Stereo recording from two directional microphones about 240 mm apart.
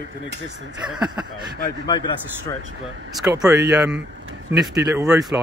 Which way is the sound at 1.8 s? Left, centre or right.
Centre.